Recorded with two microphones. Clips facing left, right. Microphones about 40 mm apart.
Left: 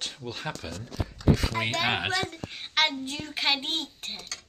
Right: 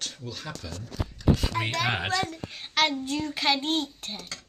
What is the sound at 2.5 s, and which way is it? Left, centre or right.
A child's voice, left.